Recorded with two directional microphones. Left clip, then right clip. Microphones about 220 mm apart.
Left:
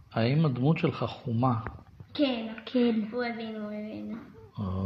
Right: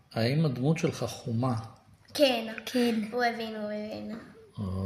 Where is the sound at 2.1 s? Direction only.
30° right (ahead or behind).